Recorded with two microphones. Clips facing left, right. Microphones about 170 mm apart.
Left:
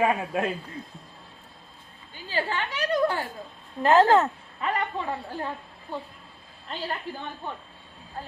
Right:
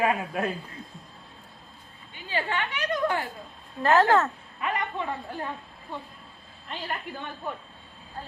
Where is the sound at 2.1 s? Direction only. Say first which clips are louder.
Left 1 dB; 35° left (ahead or behind).